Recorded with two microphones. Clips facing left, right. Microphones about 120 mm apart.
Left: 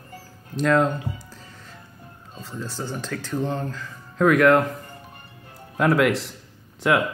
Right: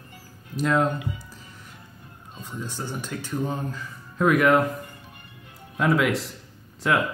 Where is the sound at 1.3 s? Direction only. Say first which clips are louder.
Left 1 dB; 90° left.